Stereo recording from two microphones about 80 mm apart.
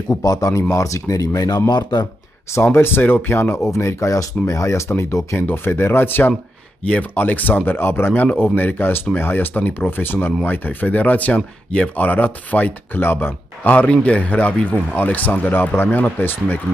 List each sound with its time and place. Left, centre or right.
0.2 s speech: left
1.7 s speech: left
2.5 s speech: left
3.7 s speech: left